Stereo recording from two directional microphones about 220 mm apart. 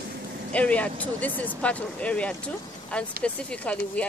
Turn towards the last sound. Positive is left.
turn(degrees=5)  # may be behind; listen again after turning